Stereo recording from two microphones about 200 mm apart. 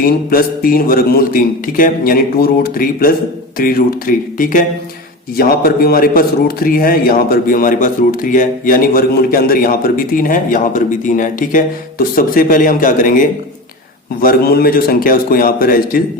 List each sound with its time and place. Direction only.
0.0 s a man's voice: 45° left (ahead or behind)